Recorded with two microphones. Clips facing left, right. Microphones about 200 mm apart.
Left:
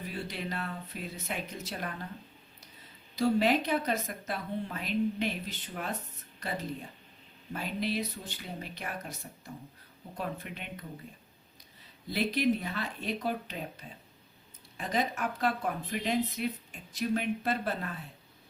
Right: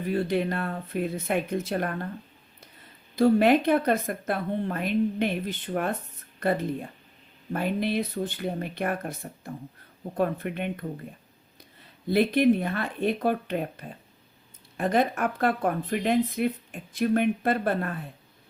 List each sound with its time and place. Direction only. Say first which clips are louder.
0.1 s speech: right 14 dB; 55° right (ahead or behind)
3.2 s speech: right 7 dB; 55° right (ahead or behind)
12.0 s speech: right 8 dB; 55° right (ahead or behind)